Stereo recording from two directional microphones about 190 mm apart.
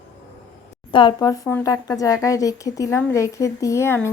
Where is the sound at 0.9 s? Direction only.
20° left (ahead or behind).